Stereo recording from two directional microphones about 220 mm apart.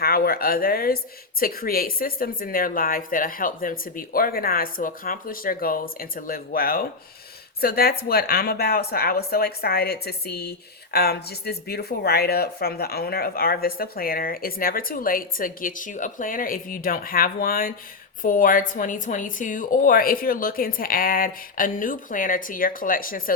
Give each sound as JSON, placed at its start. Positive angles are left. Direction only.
{"t": 0.0, "sound": "a woman's voice", "side_deg": 40}